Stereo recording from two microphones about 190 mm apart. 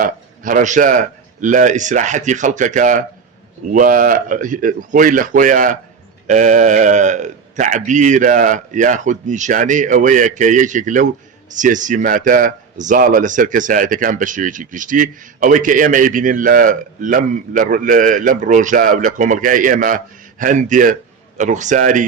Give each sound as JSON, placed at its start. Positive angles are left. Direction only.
{"t": 0.0, "sound": "a man's voice", "side_deg": -45}